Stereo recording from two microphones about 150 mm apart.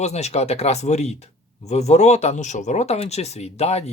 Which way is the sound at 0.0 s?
45° left (ahead or behind).